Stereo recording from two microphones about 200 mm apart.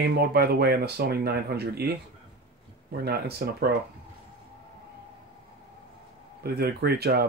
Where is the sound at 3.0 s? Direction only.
55° right (ahead or behind).